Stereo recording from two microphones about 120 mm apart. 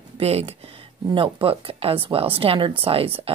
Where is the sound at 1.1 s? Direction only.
45° right (ahead or behind).